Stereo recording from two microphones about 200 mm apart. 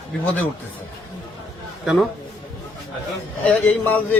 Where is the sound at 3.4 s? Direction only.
10° left (ahead or behind).